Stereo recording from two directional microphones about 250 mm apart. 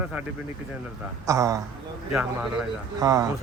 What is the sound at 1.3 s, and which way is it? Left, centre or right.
Speech, centre.